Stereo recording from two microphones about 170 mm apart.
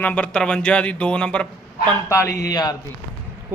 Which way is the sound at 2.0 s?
20° left (ahead or behind).